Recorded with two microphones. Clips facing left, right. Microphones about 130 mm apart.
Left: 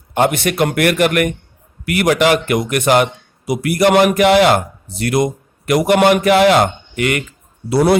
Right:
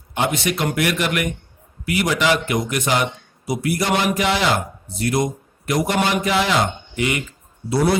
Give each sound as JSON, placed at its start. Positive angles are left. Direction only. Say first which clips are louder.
{"t": 0.1, "sound": "a man's voice", "louder": "left 6 dB", "side_deg": 55}